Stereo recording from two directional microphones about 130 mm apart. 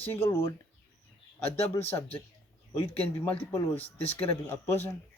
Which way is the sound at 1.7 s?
20° left (ahead or behind).